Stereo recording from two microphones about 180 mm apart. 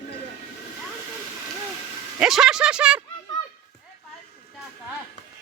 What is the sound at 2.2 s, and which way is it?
Speech, centre (ahead or behind).